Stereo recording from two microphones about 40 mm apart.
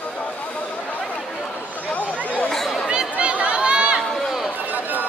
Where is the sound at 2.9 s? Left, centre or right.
Right.